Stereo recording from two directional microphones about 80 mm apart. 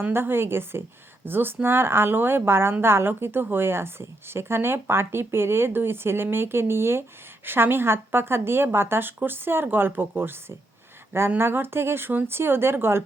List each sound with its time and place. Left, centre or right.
0.0 s a woman's voice: right
11.3 s a woman's voice: right